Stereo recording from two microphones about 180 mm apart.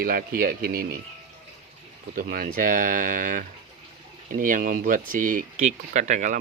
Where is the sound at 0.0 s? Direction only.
55° right (ahead or behind).